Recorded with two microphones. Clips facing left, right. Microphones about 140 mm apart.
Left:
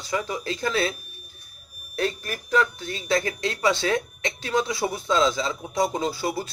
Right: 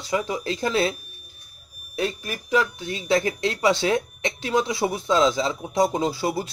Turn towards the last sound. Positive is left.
turn(degrees=-25)  # may be behind; listen again after turning